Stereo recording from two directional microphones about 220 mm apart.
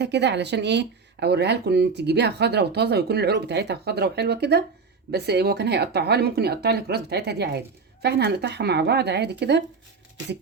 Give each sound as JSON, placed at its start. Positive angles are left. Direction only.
{"t": 0.0, "sound": "speech", "side_deg": -50}